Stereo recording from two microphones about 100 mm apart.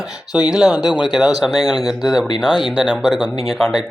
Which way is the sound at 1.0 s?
5° right (ahead or behind).